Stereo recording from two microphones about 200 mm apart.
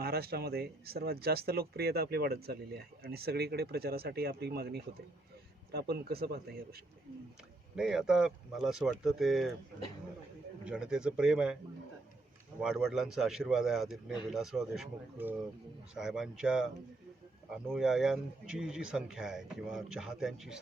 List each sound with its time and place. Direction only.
0.0 s speech: 50° right (ahead or behind)
7.8 s speech: centre (ahead or behind)
10.6 s speech: 5° right (ahead or behind)
12.5 s speech: 5° right (ahead or behind)